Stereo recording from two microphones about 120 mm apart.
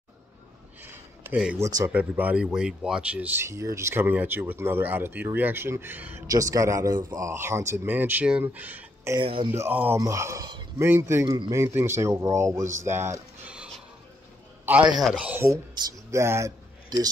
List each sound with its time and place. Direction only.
1.2 s a man's voice: 10° right (ahead or behind)
1.6 s speech: 30° right (ahead or behind)
1.9 s speech: 15° right (ahead or behind)
3.4 s speech: 25° right (ahead or behind)
6.2 s speech: 30° right (ahead or behind)
9.2 s speech: 50° right (ahead or behind)
9.5 s speech: 15° right (ahead or behind)
9.9 s speech: 25° right (ahead or behind)
14.7 s speech: 20° right (ahead or behind)
15.5 s speech: 25° right (ahead or behind)